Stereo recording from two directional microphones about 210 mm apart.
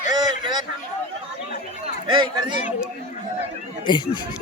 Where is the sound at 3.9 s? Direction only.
20° left (ahead or behind).